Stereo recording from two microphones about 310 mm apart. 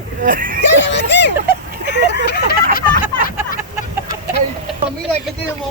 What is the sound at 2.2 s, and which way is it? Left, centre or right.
Vehicle, left.